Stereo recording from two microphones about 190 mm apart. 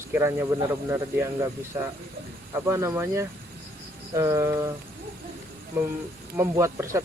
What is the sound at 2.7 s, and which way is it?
Speech, 15° right (ahead or behind).